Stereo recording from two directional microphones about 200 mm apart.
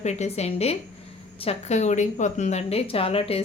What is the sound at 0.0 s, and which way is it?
A woman's voice, 35° left (ahead or behind).